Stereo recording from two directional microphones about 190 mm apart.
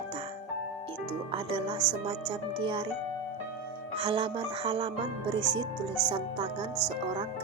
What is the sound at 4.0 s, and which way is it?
Speech, 25° right (ahead or behind).